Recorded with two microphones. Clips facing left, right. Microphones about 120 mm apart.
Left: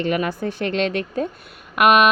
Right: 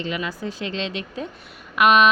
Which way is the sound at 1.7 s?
50° left (ahead or behind).